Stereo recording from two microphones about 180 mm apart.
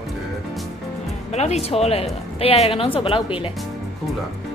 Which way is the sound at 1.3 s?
35° left (ahead or behind).